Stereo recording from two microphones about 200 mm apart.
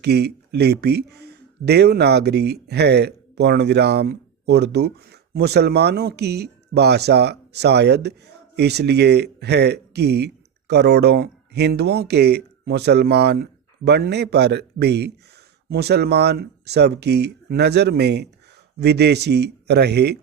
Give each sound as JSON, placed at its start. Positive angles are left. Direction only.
{"t": 0.0, "sound": "speech", "side_deg": -55}